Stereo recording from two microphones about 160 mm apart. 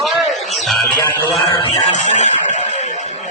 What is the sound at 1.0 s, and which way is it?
Music, 20° left (ahead or behind).